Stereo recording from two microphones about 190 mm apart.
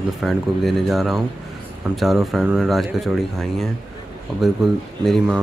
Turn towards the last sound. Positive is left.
turn(degrees=0)  # may be behind; listen again after turning